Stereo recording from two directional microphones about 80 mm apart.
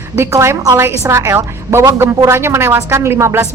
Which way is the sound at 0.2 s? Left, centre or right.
Right.